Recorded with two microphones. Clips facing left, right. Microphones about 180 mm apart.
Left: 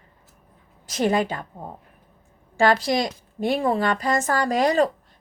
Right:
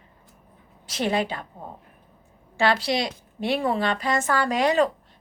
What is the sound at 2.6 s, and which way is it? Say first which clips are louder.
A woman's voice: left 3 dB; 45° left (ahead or behind).